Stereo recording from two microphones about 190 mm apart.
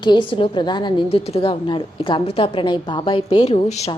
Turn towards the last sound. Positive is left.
turn(degrees=35)  # may be behind; listen again after turning